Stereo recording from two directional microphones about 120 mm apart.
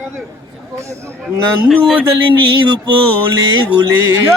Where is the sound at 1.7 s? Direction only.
5° right (ahead or behind).